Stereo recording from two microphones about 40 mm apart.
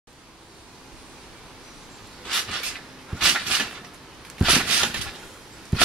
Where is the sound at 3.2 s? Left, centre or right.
Centre.